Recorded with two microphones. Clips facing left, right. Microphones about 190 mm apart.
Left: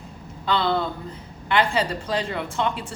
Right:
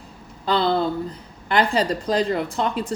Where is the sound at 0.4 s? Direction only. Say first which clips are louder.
Right 3 dB; 40° right (ahead or behind).